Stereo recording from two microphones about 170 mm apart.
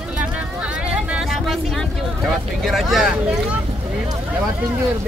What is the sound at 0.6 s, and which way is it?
Vehicle, 5° right (ahead or behind).